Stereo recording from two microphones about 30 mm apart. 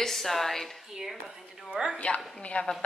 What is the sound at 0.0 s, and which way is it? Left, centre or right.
Speech, centre.